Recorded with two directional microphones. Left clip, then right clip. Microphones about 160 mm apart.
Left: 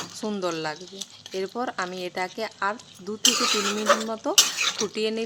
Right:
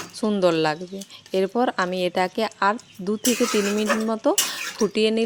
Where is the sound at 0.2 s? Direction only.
30° right (ahead or behind).